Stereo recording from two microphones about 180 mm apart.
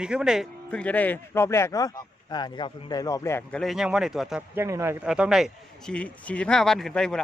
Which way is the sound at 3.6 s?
Centre (ahead or behind).